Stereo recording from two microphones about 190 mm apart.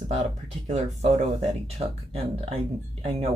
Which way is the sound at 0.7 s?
35° right (ahead or behind).